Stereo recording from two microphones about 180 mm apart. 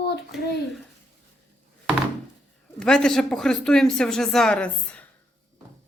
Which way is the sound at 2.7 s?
5° left (ahead or behind).